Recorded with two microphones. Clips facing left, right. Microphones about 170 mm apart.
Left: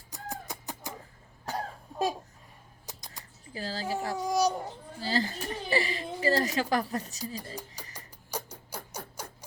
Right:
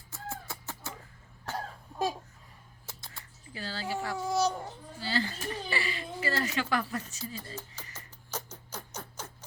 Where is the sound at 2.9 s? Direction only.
15° left (ahead or behind).